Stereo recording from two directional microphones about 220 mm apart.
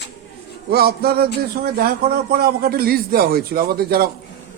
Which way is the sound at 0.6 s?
45° right (ahead or behind).